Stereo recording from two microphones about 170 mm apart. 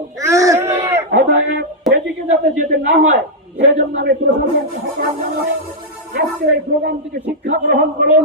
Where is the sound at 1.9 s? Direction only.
Centre (ahead or behind).